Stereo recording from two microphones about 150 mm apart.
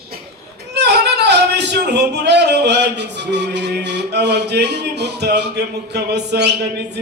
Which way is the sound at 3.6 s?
90° right.